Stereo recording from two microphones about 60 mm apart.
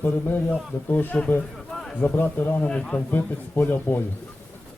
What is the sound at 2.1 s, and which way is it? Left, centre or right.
Speech, left.